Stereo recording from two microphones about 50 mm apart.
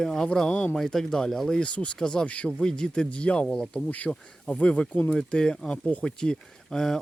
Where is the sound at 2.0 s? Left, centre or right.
Centre.